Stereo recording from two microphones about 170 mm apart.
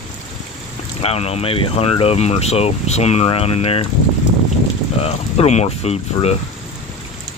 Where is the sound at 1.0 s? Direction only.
35° left (ahead or behind).